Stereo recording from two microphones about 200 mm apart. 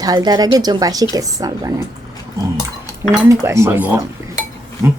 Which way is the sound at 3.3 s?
15° right (ahead or behind).